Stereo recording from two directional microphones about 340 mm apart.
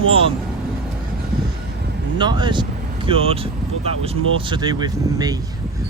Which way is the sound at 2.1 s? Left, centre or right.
Centre.